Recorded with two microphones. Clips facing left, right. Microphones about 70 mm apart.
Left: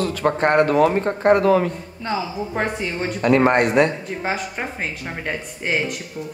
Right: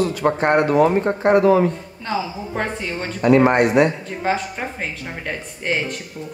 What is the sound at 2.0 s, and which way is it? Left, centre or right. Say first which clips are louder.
A woman's voice: even; centre.